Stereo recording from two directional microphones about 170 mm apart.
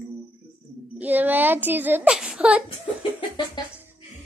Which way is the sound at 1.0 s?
10° right (ahead or behind).